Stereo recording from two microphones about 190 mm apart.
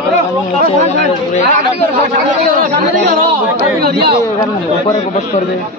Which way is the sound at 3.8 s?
55° right (ahead or behind).